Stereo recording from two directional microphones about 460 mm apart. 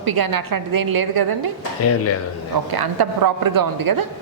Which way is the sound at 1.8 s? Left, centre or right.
Left.